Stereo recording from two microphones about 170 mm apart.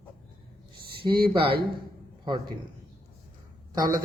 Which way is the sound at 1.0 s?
30° right (ahead or behind).